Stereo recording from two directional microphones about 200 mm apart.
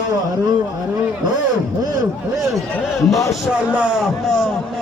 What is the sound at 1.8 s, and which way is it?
Speech, 20° right (ahead or behind).